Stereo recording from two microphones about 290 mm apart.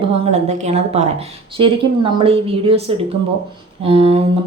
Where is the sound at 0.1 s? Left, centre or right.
Right.